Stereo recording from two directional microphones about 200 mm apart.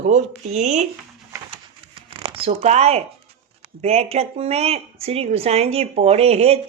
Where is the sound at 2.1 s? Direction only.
30° right (ahead or behind).